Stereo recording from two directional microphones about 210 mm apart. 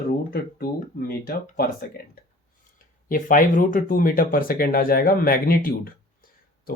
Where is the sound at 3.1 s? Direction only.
40° left (ahead or behind).